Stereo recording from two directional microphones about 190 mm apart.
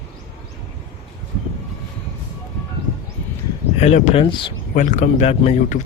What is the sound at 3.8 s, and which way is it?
Speech, 35° left (ahead or behind).